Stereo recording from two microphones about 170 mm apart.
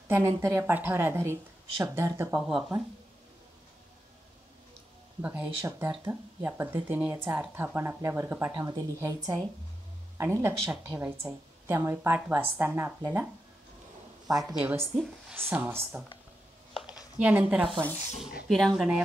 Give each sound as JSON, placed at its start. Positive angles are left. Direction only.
{"t": 0.1, "sound": "a woman's voice", "side_deg": -15}
{"t": 2.3, "sound": "speech", "side_deg": -5}
{"t": 5.2, "sound": "a woman's voice", "side_deg": -10}
{"t": 14.5, "sound": "a woman's voice", "side_deg": -10}
{"t": 16.7, "sound": "a sound", "side_deg": -5}
{"t": 17.2, "sound": "a woman's voice", "side_deg": -10}